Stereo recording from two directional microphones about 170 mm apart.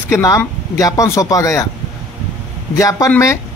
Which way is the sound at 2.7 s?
20° left (ahead or behind).